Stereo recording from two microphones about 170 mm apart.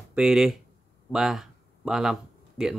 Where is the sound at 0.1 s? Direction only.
5° right (ahead or behind).